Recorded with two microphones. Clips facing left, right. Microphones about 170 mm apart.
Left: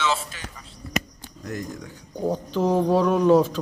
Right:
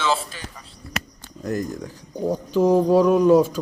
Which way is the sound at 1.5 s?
40° right (ahead or behind).